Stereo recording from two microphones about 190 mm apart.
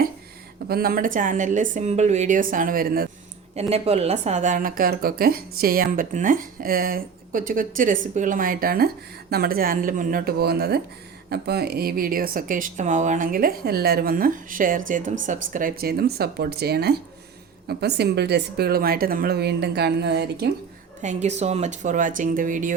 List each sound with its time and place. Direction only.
0.7 s a woman's voice: 50° right (ahead or behind)
3.5 s a woman's voice: 35° right (ahead or behind); by 20.5 s 60° right (ahead or behind)
21.0 s a woman's voice: 40° right (ahead or behind)